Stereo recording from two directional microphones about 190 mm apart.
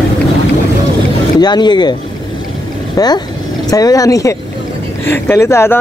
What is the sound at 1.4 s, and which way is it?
Speech, 20° left (ahead or behind).